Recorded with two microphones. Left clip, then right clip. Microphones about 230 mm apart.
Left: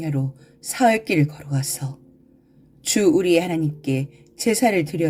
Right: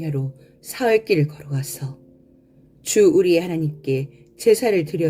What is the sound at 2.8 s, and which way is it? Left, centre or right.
Speech, left.